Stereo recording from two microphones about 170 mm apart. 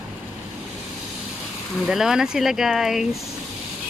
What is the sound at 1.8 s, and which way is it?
Speech, 5° right (ahead or behind).